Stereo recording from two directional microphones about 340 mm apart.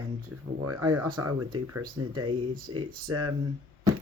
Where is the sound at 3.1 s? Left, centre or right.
Right.